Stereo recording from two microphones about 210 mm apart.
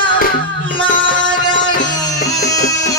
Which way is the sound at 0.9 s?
40° left (ahead or behind).